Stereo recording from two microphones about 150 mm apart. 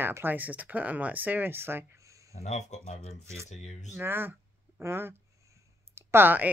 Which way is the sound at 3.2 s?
20° right (ahead or behind).